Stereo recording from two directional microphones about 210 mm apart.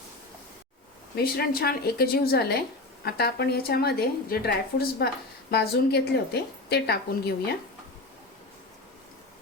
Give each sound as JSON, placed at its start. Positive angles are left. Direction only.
{"t": 1.1, "sound": "a woman's voice", "side_deg": 45}